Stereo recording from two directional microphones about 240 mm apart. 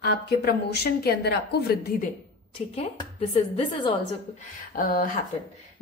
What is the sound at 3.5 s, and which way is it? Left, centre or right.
Speech, left.